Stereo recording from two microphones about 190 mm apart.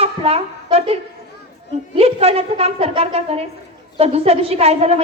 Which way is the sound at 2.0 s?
30° right (ahead or behind).